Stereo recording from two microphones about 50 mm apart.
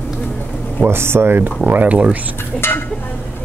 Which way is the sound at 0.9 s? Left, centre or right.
Right.